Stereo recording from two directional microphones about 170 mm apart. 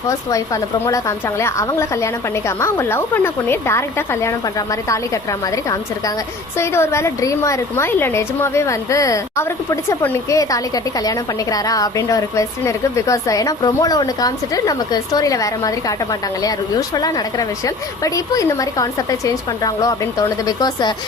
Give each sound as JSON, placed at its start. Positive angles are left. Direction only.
{"t": 0.1, "sound": "a woman's voice", "side_deg": 20}
{"t": 6.6, "sound": "a woman's voice", "side_deg": 15}